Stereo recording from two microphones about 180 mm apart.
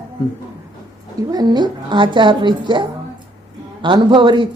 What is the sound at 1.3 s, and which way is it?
Speech, 20° right (ahead or behind).